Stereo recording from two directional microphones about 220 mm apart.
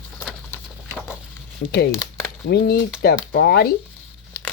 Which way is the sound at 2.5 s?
45° left (ahead or behind).